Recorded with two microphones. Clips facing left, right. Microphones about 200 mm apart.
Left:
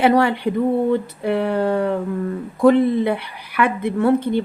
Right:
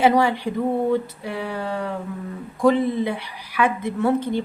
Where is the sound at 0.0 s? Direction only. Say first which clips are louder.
Left 2 dB; 60° left (ahead or behind).